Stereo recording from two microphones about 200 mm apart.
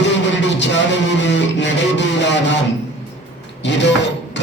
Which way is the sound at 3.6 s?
60° left (ahead or behind).